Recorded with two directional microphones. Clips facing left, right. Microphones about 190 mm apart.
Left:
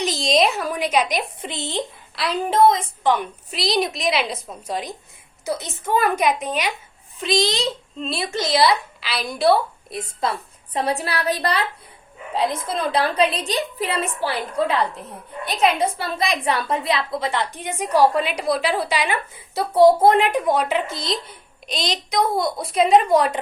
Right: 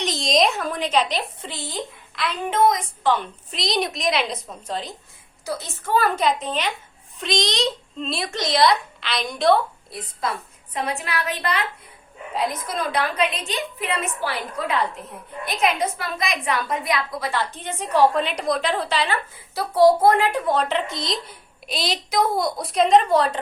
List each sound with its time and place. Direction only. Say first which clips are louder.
0.0 s a woman's voice: left 1 dB; centre (ahead or behind); by 2.8 s 30° left (ahead or behind)
3.0 s a child's voice: left 1 dB; 15° left (ahead or behind)
9.9 s a woman's voice: left 4 dB; 30° left (ahead or behind)
15.8 s a woman's voice: left 3 dB; 30° left (ahead or behind); by 23.4 s 15° left (ahead or behind)